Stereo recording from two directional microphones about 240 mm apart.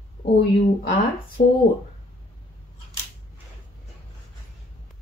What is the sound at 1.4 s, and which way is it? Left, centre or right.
Speech, left.